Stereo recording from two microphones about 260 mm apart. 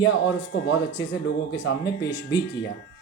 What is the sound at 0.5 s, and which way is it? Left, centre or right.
Speech, left.